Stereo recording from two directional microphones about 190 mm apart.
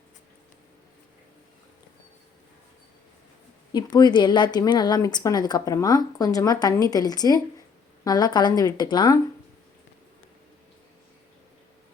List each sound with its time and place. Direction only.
3.7 s speech: 20° left (ahead or behind)